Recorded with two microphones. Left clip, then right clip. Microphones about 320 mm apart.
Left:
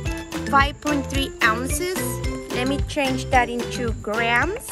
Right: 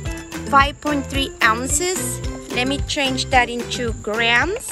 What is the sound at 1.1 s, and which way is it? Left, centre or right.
Speech, centre.